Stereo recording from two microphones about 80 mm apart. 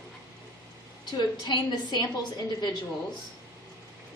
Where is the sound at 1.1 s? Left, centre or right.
Left.